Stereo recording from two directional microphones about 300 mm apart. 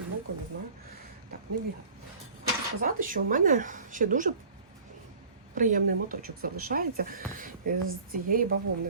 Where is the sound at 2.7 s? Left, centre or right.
Right.